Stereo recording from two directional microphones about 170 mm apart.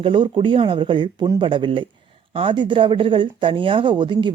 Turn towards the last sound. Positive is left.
turn(degrees=-25)  # may be behind; listen again after turning